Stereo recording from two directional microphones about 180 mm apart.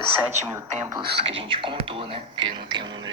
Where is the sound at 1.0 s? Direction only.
30° right (ahead or behind).